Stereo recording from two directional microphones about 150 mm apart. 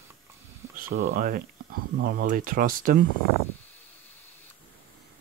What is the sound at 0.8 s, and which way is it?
Speech, 70° right (ahead or behind).